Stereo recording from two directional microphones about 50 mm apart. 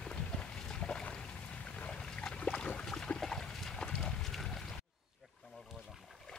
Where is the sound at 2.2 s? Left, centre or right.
Centre.